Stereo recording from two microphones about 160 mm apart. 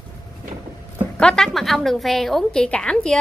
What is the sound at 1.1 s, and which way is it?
A woman's voice, 5° left (ahead or behind).